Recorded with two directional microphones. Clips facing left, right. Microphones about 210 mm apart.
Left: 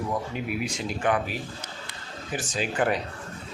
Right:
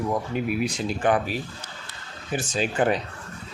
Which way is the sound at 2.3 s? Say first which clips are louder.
Right 3 dB; 25° right (ahead or behind).